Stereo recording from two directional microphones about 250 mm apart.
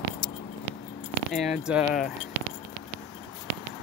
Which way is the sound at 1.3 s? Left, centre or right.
Centre.